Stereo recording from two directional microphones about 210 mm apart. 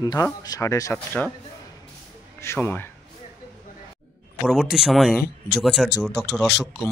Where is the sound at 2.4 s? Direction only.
10° left (ahead or behind).